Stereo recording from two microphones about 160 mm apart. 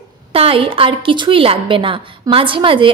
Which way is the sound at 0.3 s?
35° right (ahead or behind).